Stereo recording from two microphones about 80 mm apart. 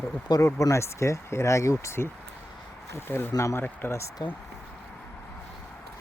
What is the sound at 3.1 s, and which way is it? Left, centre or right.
Speech, left.